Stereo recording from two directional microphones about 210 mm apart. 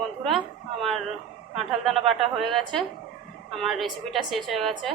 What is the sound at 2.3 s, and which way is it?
A woman's voice, centre (ahead or behind).